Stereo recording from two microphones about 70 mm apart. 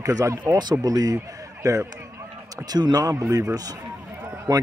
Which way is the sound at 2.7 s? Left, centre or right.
Right.